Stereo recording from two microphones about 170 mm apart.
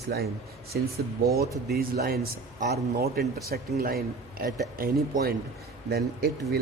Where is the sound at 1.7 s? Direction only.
60° right (ahead or behind).